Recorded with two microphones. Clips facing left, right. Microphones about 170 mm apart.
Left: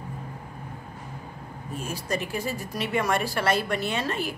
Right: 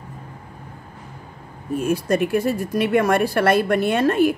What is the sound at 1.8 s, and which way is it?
A woman's voice, 55° right (ahead or behind).